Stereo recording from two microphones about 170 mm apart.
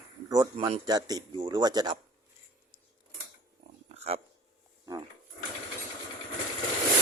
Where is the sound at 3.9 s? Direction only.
40° right (ahead or behind).